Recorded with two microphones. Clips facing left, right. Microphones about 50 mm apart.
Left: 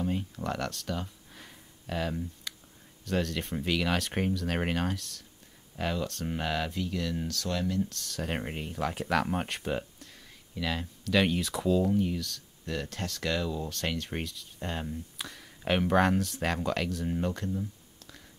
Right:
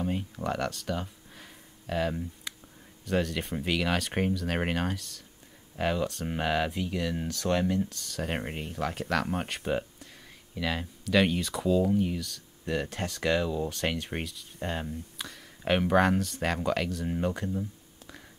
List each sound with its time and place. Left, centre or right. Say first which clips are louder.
0.0 s a sound: right 1 dB; centre
3.1 s speech: right 2 dB; centre; by 7.9 s right
7.9 s speech: right 1 dB; centre
12.6 s speech: right 4 dB; centre